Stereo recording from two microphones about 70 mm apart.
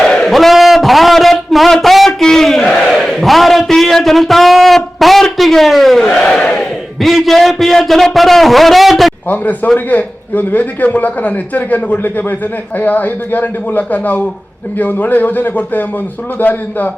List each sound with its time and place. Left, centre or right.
0.0 s a sound: centre
6.1 s crowd: centre
7.0 s a man's voice: centre
9.3 s a man's voice: left